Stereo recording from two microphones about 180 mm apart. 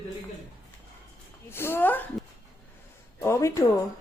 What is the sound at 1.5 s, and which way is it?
Speech, 15° left (ahead or behind).